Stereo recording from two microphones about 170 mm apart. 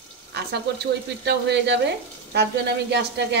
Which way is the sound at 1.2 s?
90° right.